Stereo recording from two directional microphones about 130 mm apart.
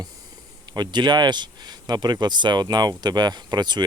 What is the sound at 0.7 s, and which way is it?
Speech, 35° right (ahead or behind).